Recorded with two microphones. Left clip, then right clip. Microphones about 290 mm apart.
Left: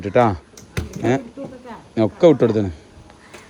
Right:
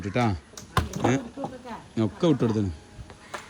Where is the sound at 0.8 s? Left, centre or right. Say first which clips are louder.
Left 5 dB; centre.